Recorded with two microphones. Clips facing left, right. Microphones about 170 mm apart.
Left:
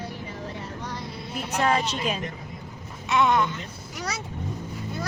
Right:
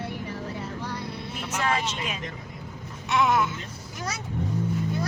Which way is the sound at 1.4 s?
35° left (ahead or behind).